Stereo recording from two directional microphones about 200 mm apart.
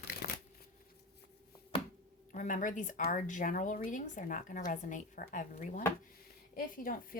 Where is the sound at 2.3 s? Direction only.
40° left (ahead or behind).